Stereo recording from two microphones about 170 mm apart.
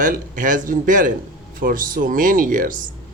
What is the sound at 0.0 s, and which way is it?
A man's voice, 50° right (ahead or behind).